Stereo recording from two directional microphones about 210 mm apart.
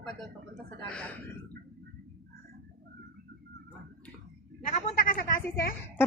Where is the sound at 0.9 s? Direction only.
5° left (ahead or behind).